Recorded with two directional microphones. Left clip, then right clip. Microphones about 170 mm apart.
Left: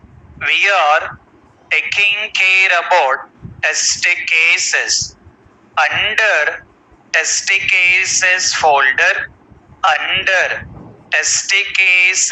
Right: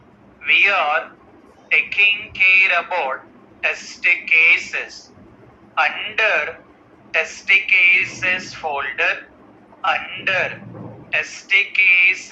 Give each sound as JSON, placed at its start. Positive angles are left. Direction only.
{"t": 0.3, "sound": "speech", "side_deg": 60}